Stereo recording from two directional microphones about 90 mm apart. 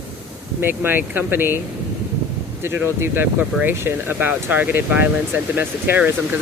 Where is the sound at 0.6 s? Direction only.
25° right (ahead or behind).